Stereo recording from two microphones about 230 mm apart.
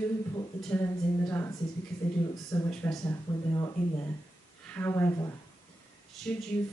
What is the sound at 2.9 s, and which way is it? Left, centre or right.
Speech, centre.